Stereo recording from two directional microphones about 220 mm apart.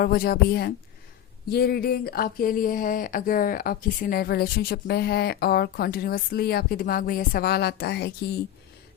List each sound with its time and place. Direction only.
0.0 s speech: 45° left (ahead or behind)